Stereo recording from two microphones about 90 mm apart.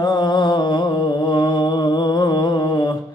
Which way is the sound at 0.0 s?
55° left (ahead or behind).